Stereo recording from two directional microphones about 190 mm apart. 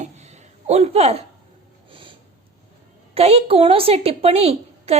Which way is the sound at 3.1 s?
30° right (ahead or behind).